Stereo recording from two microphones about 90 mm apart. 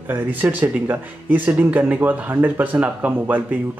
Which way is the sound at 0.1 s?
20° right (ahead or behind).